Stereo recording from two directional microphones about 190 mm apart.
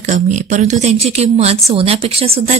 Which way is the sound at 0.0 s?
40° right (ahead or behind).